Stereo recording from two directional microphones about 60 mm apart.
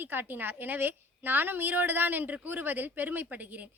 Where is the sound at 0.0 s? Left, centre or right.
Right.